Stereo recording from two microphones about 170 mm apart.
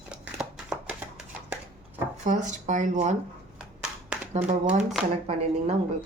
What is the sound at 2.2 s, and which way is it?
Speech, 45° right (ahead or behind).